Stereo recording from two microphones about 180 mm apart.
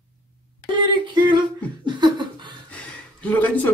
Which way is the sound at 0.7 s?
25° right (ahead or behind).